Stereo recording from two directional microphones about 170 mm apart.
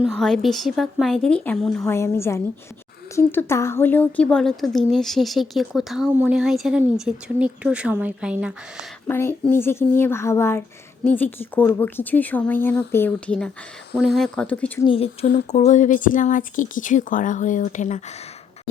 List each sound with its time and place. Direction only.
0.0 s a woman's voice: centre (ahead or behind)
1.9 s a woman's voice: 15° left (ahead or behind); by 8.9 s 5° right (ahead or behind)
9.0 s a woman's voice: 15° left (ahead or behind)
14.8 s speech: 35° left (ahead or behind)
15.5 s speech: 45° left (ahead or behind)